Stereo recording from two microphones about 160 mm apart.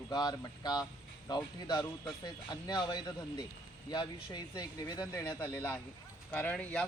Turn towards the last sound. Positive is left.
turn(degrees=5)  # may be behind; listen again after turning